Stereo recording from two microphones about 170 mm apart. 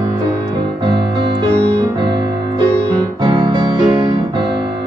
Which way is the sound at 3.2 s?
25° right (ahead or behind).